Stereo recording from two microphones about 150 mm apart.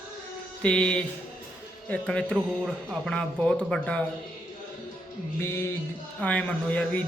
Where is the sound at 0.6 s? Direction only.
5° left (ahead or behind).